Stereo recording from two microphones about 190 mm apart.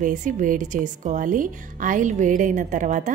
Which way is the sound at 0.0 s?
40° right (ahead or behind).